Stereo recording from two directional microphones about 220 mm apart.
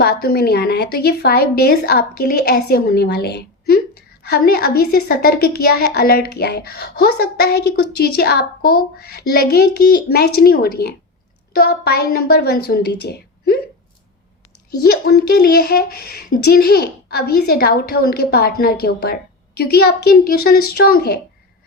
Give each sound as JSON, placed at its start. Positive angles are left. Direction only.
{"t": 0.0, "sound": "a woman's voice", "side_deg": 45}
{"t": 14.8, "sound": "a woman's voice", "side_deg": 45}